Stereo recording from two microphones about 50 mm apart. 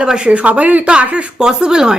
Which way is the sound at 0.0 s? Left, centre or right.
Right.